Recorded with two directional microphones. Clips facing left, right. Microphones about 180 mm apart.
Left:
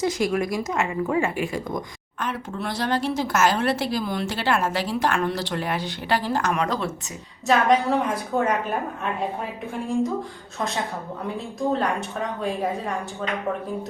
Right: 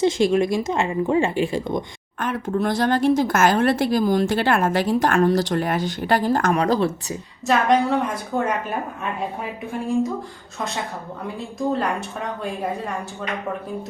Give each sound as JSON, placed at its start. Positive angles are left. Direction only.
{"t": 0.0, "sound": "speech", "side_deg": -25}
{"t": 2.1, "sound": "speech", "side_deg": -50}
{"t": 7.4, "sound": "a woman's voice", "side_deg": 0}
{"t": 11.7, "sound": "a woman's voice", "side_deg": 0}